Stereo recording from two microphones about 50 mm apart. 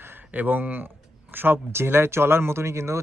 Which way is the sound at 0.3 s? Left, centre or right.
Right.